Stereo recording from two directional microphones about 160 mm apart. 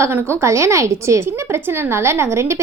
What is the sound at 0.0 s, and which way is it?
A woman's voice, 15° right (ahead or behind).